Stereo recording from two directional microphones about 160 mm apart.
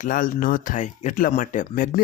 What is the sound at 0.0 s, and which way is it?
Speech, 60° left (ahead or behind).